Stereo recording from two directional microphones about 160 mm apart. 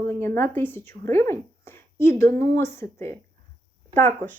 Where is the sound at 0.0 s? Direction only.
15° left (ahead or behind).